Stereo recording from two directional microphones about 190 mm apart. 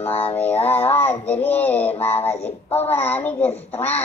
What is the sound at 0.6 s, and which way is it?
Child singing, 10° left (ahead or behind).